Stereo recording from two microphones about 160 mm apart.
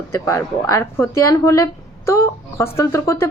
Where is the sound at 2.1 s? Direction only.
15° left (ahead or behind).